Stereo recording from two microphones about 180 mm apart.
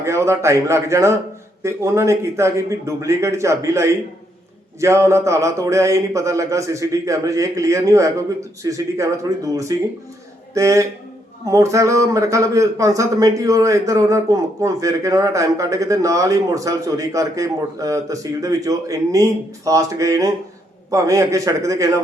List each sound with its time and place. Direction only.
0.0 s a man's voice: 15° right (ahead or behind)